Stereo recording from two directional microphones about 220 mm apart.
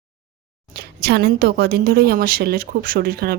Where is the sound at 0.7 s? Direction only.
45° right (ahead or behind).